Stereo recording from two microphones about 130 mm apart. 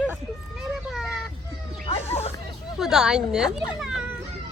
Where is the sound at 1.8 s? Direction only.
50° left (ahead or behind).